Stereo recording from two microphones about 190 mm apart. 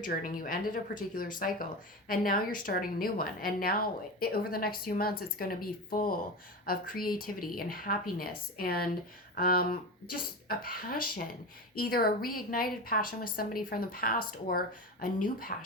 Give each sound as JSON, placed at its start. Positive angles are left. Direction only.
{"t": 0.0, "sound": "a woman's voice", "side_deg": 45}